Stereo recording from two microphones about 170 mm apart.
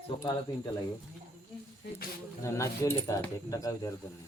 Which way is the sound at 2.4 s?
15° left (ahead or behind).